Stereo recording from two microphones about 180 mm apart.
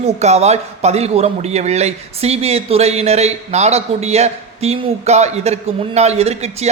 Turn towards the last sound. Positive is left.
turn(degrees=-35)  # may be behind; listen again after turning